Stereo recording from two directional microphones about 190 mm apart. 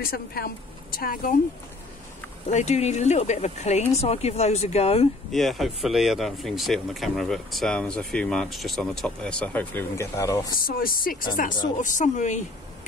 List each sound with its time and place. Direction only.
0.0 s speech: 55° left (ahead or behind)
2.5 s speech: 35° left (ahead or behind)
5.3 s speech: centre (ahead or behind)
10.6 s speech: 50° left (ahead or behind)